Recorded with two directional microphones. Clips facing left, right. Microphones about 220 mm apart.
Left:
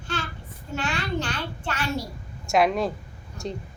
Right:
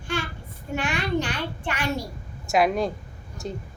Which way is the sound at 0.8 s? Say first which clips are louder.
Right 3 dB; 15° right (ahead or behind).